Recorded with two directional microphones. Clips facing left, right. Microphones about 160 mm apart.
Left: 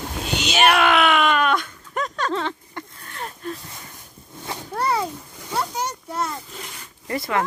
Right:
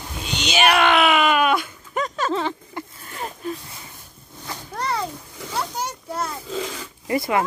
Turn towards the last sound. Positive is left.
turn(degrees=-10)  # may be behind; listen again after turning